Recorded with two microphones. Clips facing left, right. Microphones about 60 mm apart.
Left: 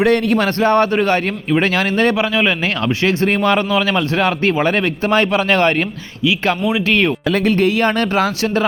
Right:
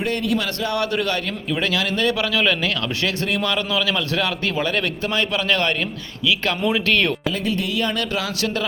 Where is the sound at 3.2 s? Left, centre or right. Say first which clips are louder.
Left 8 dB; left; by 7.2 s centre.